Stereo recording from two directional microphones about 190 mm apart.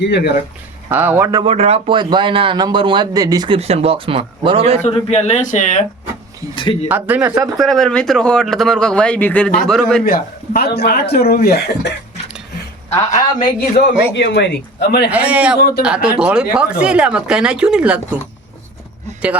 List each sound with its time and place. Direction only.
0.0 s speech: 60° left (ahead or behind)
0.9 s speech: 10° right (ahead or behind)
1.5 s a man's voice: 30° right (ahead or behind)
4.8 s speech: 30° left (ahead or behind)
6.8 s speech: 10° right (ahead or behind)
7.5 s speech: centre (ahead or behind)
10.1 s speech: 50° left (ahead or behind)
13.4 s speech: 40° left (ahead or behind)
14.2 s speech: 65° left (ahead or behind)
15.1 s speech: 5° right (ahead or behind)